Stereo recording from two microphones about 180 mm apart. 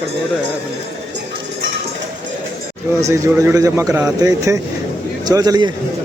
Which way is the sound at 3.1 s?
15° right (ahead or behind).